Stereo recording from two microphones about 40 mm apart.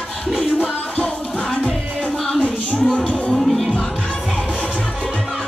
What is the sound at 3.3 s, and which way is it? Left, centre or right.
Music, centre.